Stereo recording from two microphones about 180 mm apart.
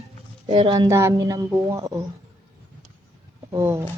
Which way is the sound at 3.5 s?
15° right (ahead or behind).